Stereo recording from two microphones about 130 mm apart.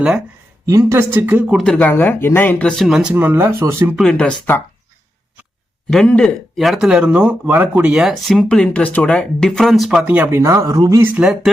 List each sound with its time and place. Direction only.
0.6 s speech: 25° right (ahead or behind)
1.5 s speech: 5° left (ahead or behind); by 3.9 s 20° right (ahead or behind)
3.9 s speech: 5° left (ahead or behind)
5.9 s speech: 5° left (ahead or behind)
10.0 s speech: 10° right (ahead or behind)
10.4 s speech: 25° right (ahead or behind)
11.1 s speech: 5° right (ahead or behind)